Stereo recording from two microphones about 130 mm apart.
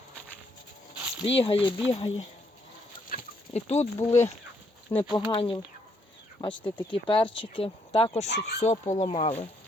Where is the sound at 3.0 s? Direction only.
75° left (ahead or behind); by 3.9 s 55° left (ahead or behind).